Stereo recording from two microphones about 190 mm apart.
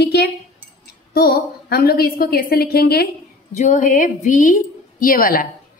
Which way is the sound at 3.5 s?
40° left (ahead or behind).